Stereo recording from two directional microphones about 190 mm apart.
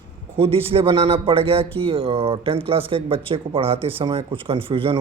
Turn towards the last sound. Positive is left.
turn(degrees=-30)  # may be behind; listen again after turning